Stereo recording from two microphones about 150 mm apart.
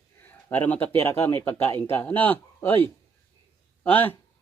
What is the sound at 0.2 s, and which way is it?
Speech, 15° left (ahead or behind).